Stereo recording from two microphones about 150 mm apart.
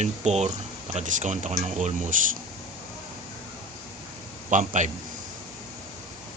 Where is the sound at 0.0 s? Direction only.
50° right (ahead or behind).